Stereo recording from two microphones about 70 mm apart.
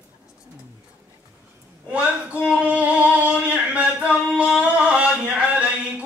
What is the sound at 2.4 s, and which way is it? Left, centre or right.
Male singing, centre.